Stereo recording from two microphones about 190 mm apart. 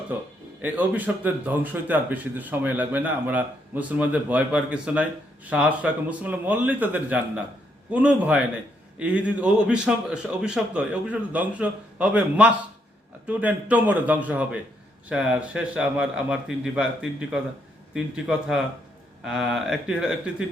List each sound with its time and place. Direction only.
0.6 s a man's voice: 10° right (ahead or behind)